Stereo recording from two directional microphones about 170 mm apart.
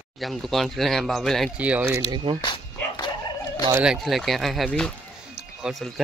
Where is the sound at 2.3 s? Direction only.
25° left (ahead or behind).